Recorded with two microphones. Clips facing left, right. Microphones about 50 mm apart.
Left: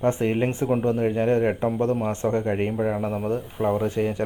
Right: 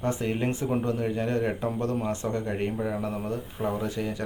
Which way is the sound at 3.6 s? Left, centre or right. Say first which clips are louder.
Left 7 dB; left.